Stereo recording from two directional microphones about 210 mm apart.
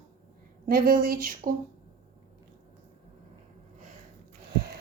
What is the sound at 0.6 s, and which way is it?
Speech, 45° right (ahead or behind).